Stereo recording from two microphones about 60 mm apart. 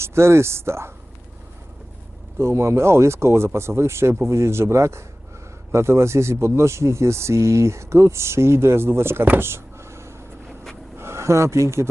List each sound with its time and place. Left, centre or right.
0.0 s speech: right
2.4 s speech: right
9.4 s a sound: right
10.9 s speech: right